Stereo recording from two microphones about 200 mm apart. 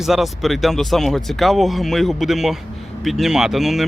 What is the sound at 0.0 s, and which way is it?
Speech, centre (ahead or behind).